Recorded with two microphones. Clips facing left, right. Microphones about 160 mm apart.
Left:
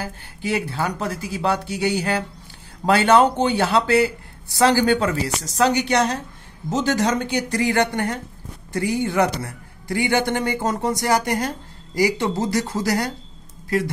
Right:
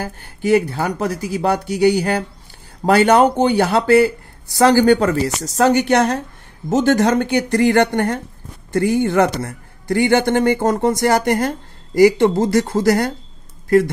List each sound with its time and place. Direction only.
0.0 s a woman's voice: 45° right (ahead or behind)